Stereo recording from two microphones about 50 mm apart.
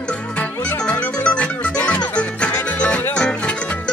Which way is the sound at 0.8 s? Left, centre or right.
Left.